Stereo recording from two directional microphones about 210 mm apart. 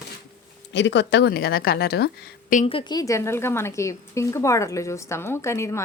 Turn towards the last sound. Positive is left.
turn(degrees=15)  # may be behind; listen again after turning